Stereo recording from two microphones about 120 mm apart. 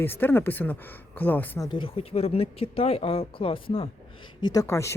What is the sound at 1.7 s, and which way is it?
Speech, 45° left (ahead or behind).